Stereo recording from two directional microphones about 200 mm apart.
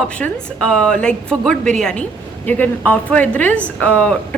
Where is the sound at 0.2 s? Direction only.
5° left (ahead or behind).